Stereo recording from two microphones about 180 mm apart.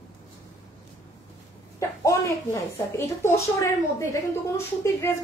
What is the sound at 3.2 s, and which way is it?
A woman's voice, 15° left (ahead or behind).